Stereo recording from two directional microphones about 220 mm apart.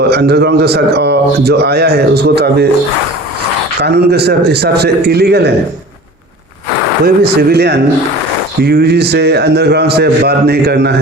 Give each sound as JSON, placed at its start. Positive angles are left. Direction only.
{"t": 0.1, "sound": "a man's voice", "side_deg": -45}
{"t": 3.8, "sound": "a man's voice", "side_deg": -50}
{"t": 7.0, "sound": "a man's voice", "side_deg": -45}